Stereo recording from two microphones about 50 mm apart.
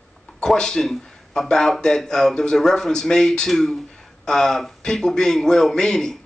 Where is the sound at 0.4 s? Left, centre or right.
Centre.